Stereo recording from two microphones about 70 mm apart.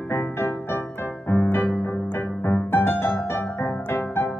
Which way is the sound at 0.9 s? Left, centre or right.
Left.